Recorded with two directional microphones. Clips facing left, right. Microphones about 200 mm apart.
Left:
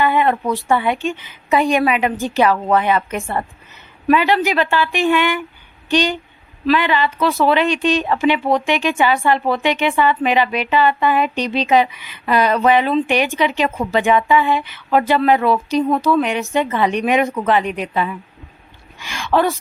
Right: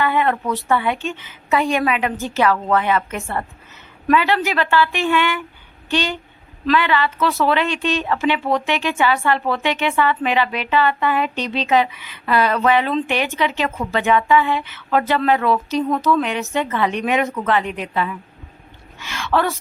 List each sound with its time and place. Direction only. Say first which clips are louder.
0.0 s a woman's voice: left 3 dB; 15° left (ahead or behind)